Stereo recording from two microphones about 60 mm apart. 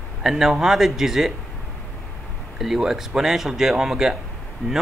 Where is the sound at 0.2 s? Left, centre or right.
Centre.